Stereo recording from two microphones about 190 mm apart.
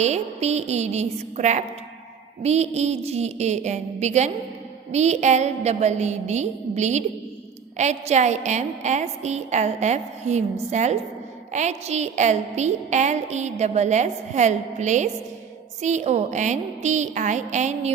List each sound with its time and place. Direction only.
0.0 s a woman's voice: 35° right (ahead or behind)